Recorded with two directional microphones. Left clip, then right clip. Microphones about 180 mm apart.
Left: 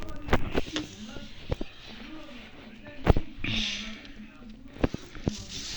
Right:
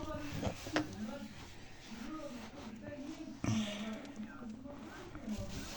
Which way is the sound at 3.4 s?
5° right (ahead or behind).